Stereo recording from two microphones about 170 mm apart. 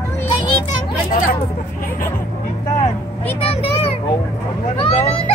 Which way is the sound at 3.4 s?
35° left (ahead or behind).